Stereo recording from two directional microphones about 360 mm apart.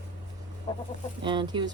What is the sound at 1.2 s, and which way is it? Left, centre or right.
Speech, centre.